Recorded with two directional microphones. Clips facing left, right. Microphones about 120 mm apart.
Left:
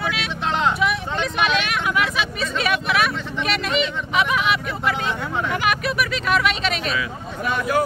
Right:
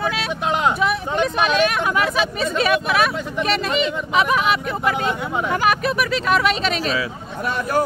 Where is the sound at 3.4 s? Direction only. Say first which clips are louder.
Right 2 dB; 40° right (ahead or behind).